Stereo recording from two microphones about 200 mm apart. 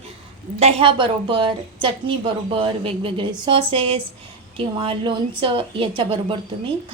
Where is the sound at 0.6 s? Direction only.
25° right (ahead or behind).